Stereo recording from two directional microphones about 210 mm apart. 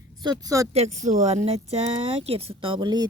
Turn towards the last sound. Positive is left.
turn(degrees=-20)  # may be behind; listen again after turning